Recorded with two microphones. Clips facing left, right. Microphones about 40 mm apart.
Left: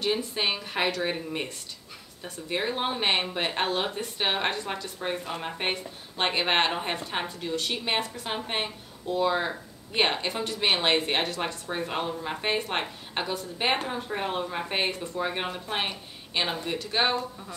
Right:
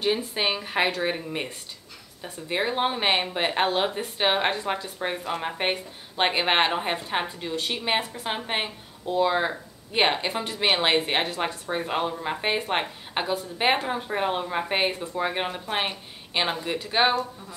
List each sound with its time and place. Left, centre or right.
0.0 s speech: centre